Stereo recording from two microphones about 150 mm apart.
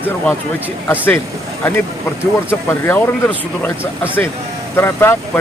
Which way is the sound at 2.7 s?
10° left (ahead or behind).